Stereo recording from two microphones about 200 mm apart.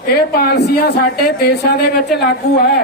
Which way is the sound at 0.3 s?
55° left (ahead or behind).